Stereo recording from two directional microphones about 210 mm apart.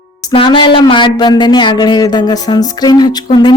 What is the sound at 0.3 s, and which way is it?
Speech, 25° left (ahead or behind).